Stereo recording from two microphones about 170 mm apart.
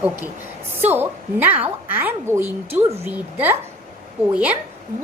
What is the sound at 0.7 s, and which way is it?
A woman's voice, 10° right (ahead or behind).